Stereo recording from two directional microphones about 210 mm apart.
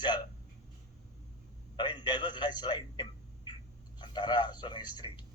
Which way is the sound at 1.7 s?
20° left (ahead or behind).